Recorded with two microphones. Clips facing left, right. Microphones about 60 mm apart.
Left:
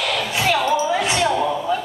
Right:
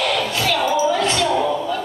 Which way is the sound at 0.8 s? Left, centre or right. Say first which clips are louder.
Right 1 dB; centre.